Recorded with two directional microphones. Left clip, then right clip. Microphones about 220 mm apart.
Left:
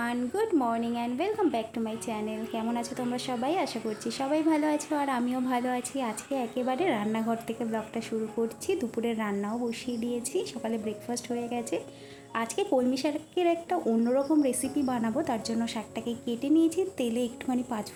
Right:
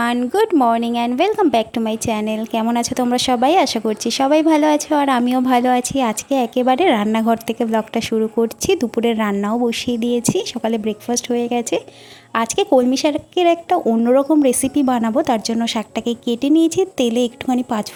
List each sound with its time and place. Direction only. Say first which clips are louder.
0.0 s a woman's voice: right 13 dB; 40° right (ahead or behind)